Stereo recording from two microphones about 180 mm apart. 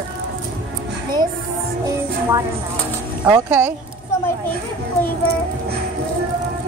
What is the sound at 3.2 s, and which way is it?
Speech, 10° right (ahead or behind).